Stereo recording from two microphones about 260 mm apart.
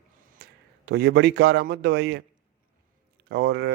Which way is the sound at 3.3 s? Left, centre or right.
Right.